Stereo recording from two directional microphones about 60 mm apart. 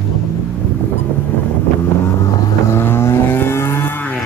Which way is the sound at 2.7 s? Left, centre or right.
Left.